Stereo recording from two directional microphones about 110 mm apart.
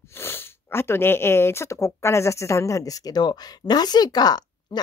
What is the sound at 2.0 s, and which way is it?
Speech, 25° left (ahead or behind).